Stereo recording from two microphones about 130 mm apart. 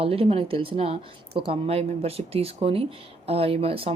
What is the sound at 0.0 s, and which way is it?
Speech, 45° right (ahead or behind).